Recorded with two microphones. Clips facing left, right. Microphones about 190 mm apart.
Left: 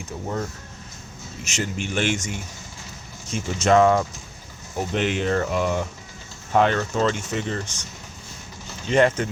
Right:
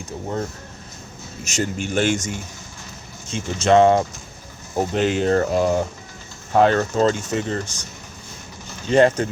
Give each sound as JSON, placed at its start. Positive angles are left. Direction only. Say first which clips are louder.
{"t": 1.5, "sound": "speech", "louder": "right 4 dB", "side_deg": -45}
{"t": 3.2, "sound": "speech", "louder": "right 2 dB", "side_deg": -30}
{"t": 8.9, "sound": "speech", "louder": "right 3 dB", "side_deg": -35}